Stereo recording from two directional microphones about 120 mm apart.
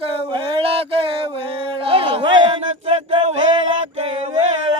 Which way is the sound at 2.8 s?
55° right (ahead or behind).